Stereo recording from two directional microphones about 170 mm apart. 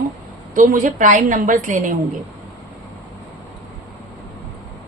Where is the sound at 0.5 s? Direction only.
50° right (ahead or behind).